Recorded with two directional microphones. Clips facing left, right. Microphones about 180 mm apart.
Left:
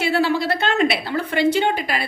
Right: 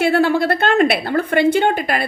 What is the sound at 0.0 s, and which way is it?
A woman's voice, 50° right (ahead or behind).